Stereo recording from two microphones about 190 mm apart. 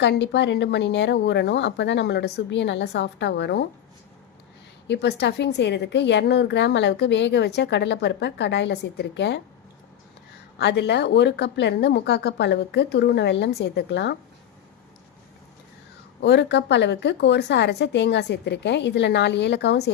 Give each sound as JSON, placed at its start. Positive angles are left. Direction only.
{"t": 0.0, "sound": "a woman's voice", "side_deg": 65}
{"t": 4.9, "sound": "a woman's voice", "side_deg": 60}
{"t": 10.6, "sound": "a woman's voice", "side_deg": 65}
{"t": 16.2, "sound": "a woman's voice", "side_deg": 65}